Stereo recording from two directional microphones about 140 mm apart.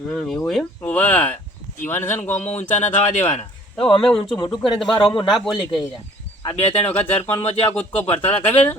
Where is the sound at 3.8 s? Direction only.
40° left (ahead or behind).